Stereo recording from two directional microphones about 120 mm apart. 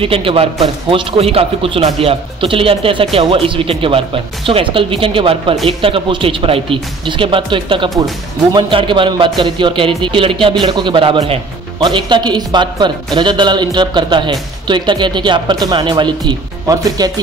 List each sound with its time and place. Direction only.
0.0 s a man's voice: 50° right (ahead or behind)
11.8 s a man's voice: 40° right (ahead or behind)